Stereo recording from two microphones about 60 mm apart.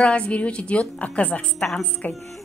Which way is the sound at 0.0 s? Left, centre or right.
Centre.